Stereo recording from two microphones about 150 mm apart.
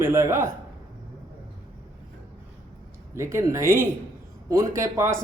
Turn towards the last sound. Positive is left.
turn(degrees=-20)  # may be behind; listen again after turning